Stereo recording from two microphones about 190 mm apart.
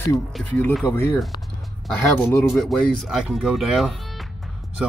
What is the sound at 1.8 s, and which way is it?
Speech, centre (ahead or behind).